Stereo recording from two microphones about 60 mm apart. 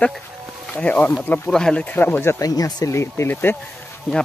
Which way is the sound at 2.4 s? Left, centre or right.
Left.